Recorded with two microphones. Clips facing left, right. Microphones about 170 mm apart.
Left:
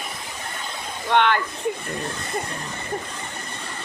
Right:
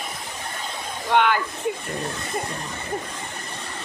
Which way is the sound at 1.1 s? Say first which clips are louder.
Even; 5° right (ahead or behind).